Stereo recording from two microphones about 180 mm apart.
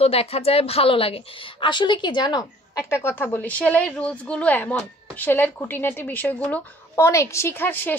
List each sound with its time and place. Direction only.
0.0 s a woman's voice: 35° left (ahead or behind)
2.9 s a woman's voice: 10° left (ahead or behind)